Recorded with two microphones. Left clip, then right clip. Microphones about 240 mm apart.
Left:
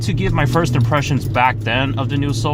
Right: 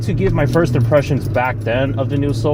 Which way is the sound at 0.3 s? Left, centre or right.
Left.